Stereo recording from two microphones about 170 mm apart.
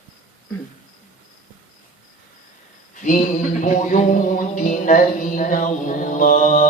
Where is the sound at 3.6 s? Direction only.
50° left (ahead or behind).